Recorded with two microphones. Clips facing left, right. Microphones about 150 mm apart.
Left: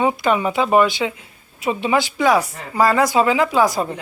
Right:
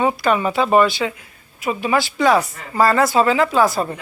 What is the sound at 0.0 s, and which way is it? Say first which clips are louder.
Speech: even; 15° left (ahead or behind).